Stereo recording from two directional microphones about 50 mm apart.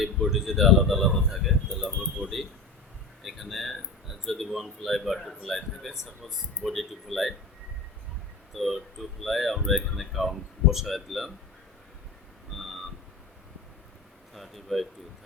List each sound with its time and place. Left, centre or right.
0.0 s a man's voice: centre
2.2 s speech: right
3.2 s a man's voice: centre
8.5 s a man's voice: centre
12.5 s a sound: centre
14.3 s speech: centre